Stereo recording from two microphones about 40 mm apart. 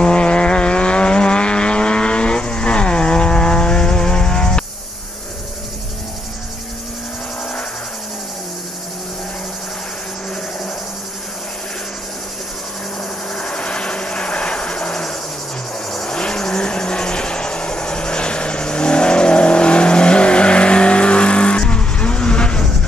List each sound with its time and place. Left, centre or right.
0.0 s vehicle: left
13.3 s helicopter: left
15.9 s vehicle: centre; by 22.7 s left